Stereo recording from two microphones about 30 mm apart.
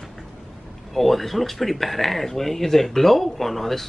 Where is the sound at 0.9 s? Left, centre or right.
Centre.